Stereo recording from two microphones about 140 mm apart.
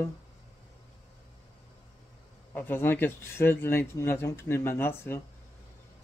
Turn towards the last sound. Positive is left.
turn(degrees=15)  # may be behind; listen again after turning